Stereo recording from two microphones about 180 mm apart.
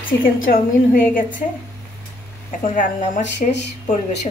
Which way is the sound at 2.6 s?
45° left (ahead or behind).